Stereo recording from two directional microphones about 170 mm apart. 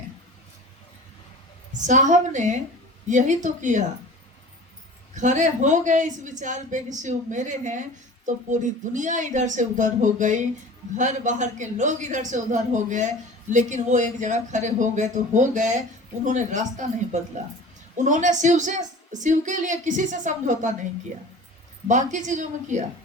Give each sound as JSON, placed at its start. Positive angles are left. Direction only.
{"t": 1.9, "sound": "a man's voice", "side_deg": -45}
{"t": 5.1, "sound": "a man's voice", "side_deg": -45}
{"t": 21.8, "sound": "a man's voice", "side_deg": -45}